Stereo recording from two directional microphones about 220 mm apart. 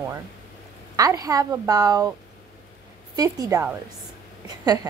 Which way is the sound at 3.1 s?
15° right (ahead or behind).